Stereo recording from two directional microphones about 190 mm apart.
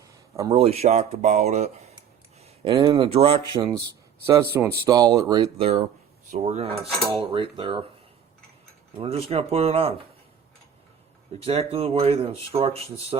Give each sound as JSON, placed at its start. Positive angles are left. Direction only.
{"t": 0.0, "sound": "a sound", "side_deg": -15}
{"t": 0.5, "sound": "speech", "side_deg": -30}
{"t": 3.6, "sound": "speech", "side_deg": -15}
{"t": 9.0, "sound": "speech", "side_deg": -30}
{"t": 11.4, "sound": "speech", "side_deg": -30}